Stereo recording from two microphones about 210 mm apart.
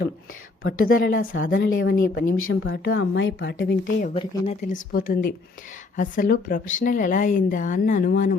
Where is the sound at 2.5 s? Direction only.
55° left (ahead or behind).